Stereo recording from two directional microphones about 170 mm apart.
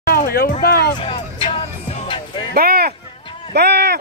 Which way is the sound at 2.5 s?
65° right (ahead or behind).